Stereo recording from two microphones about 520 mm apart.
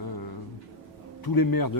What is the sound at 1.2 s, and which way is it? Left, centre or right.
Speech, left.